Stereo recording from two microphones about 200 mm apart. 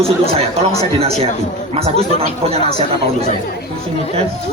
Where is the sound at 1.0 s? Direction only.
30° right (ahead or behind).